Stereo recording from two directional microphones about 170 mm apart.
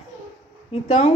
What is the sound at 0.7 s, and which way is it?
Speech, 40° left (ahead or behind).